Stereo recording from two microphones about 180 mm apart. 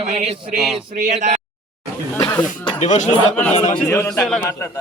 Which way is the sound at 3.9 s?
15° left (ahead or behind).